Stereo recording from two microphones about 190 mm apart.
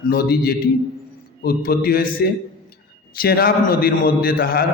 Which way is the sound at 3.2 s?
50° left (ahead or behind).